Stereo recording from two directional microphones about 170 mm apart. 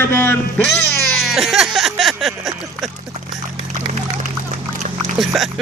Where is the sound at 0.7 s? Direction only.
Centre (ahead or behind).